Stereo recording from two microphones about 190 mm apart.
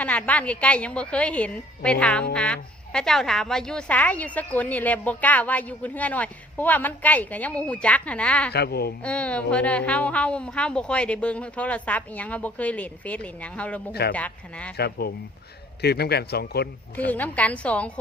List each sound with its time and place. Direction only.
0.0 s a woman's voice: 5° left (ahead or behind)
8.5 s a man's voice: 55° left (ahead or behind)
9.0 s a woman's voice: 5° left (ahead or behind)
14.8 s a man's voice: 55° left (ahead or behind)
17.1 s a woman's voice: 10° left (ahead or behind)